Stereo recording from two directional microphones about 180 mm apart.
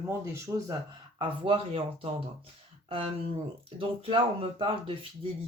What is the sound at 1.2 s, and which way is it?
Speech, 30° right (ahead or behind).